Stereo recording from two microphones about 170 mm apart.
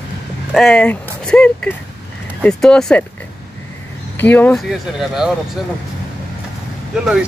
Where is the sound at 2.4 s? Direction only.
5° left (ahead or behind).